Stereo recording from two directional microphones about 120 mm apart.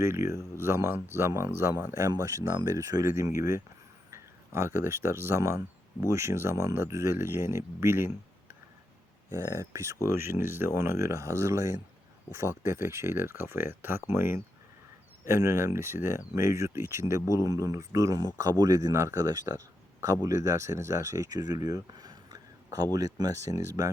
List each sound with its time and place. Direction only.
0.0 s speech: 25° right (ahead or behind)
9.4 s speech: 25° right (ahead or behind)